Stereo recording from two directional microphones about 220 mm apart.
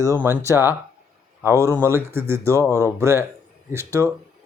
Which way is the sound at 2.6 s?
10° left (ahead or behind).